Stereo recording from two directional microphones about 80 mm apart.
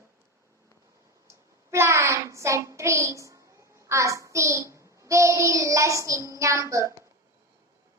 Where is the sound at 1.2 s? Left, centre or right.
Right.